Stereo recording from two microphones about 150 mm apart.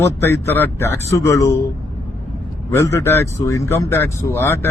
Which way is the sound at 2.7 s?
20° left (ahead or behind).